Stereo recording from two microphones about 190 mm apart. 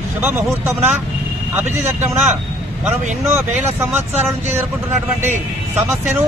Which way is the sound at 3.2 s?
15° right (ahead or behind).